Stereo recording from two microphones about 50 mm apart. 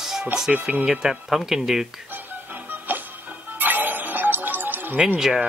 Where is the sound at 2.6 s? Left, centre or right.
Right.